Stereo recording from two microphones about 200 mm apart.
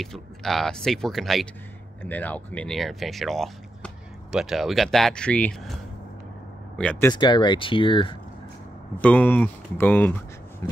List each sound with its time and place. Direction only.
0.0 s speech: centre (ahead or behind)
6.8 s speech: 5° left (ahead or behind)
7.1 s speech: 20° left (ahead or behind)
8.9 s speech: 10° left (ahead or behind)